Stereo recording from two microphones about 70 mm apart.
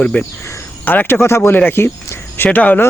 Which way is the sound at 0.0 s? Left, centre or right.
Centre.